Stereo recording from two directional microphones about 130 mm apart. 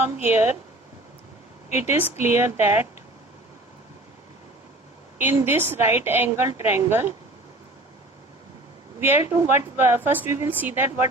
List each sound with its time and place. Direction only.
0.2 s a woman's voice: 15° right (ahead or behind)
2.0 s a woman's voice: 15° right (ahead or behind)
5.2 s a woman's voice: 20° right (ahead or behind)
9.0 s a woman's voice: 20° right (ahead or behind)